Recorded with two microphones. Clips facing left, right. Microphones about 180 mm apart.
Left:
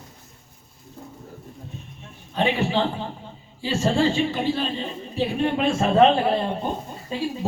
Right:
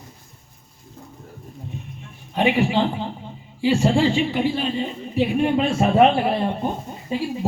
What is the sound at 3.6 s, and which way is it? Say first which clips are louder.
A man's voice: right 4 dB; 15° right (ahead or behind).